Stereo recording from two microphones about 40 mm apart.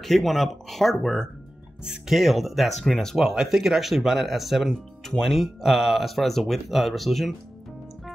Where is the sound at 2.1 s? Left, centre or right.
Centre.